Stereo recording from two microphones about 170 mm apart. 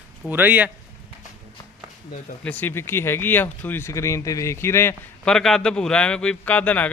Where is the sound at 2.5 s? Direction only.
10° left (ahead or behind).